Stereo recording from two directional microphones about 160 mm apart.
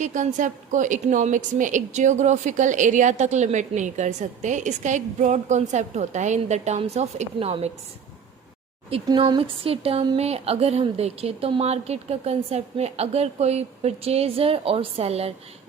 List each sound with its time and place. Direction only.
0.0 s a woman's voice: 50° right (ahead or behind)
9.0 s a woman's voice: 30° right (ahead or behind)